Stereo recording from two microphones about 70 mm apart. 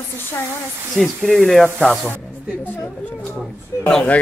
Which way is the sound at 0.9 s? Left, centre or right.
Centre.